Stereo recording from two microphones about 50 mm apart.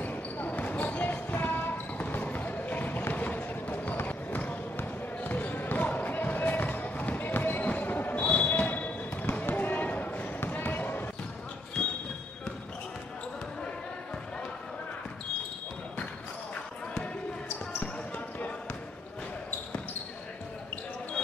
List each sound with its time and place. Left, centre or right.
0.0 s basketball bounce: left
3.9 s run: left
4.7 s basketball bounce: left
17.7 s basketball bounce: left